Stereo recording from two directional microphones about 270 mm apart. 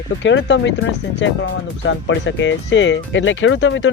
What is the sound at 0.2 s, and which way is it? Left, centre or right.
Speech, left.